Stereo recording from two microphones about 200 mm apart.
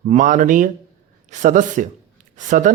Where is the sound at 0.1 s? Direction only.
40° right (ahead or behind).